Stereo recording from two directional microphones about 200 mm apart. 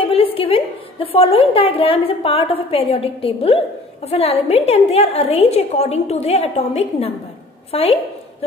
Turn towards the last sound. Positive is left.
turn(degrees=30)  # may be behind; listen again after turning